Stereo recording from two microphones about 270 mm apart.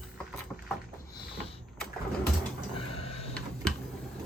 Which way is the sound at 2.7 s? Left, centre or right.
Left.